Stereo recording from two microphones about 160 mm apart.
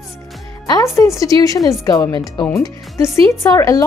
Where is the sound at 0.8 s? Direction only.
20° left (ahead or behind).